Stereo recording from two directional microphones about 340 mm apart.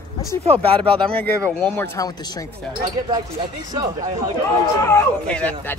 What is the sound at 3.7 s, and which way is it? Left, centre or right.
Speech, centre.